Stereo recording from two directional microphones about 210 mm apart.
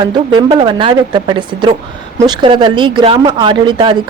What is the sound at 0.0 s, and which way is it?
Speech, 20° right (ahead or behind).